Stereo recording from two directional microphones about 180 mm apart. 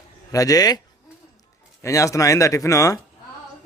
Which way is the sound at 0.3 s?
20° left (ahead or behind).